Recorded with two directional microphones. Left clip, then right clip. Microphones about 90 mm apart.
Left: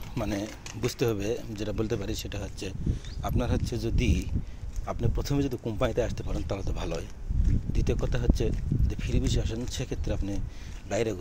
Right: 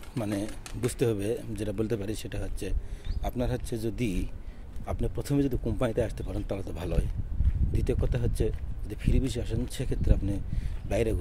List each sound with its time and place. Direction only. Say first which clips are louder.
0.2 s speech: even; 35° right (ahead or behind)
10.9 s speech: even; 40° right (ahead or behind)